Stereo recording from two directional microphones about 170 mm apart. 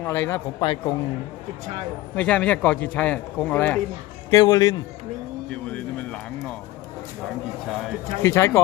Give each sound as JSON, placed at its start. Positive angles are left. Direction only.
{"t": 0.0, "sound": "a man's voice", "side_deg": 15}
{"t": 0.6, "sound": "a man's voice", "side_deg": 25}
{"t": 2.1, "sound": "a man's voice", "side_deg": 5}
{"t": 4.3, "sound": "a man's voice", "side_deg": 25}
{"t": 5.5, "sound": "a man's voice", "side_deg": 5}
{"t": 8.2, "sound": "a man's voice", "side_deg": 15}